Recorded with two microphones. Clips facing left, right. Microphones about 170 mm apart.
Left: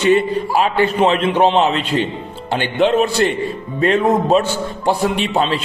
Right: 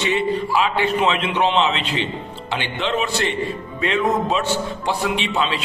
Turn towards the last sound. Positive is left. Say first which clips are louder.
# left 5 dB
turn(degrees=45)  # may be behind; listen again after turning